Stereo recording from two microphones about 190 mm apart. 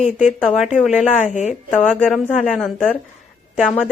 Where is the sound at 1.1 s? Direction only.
35° left (ahead or behind).